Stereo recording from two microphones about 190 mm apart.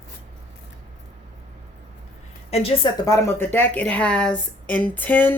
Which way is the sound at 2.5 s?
30° left (ahead or behind).